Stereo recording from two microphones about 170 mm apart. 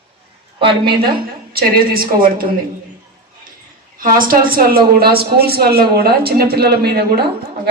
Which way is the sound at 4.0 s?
55° right (ahead or behind).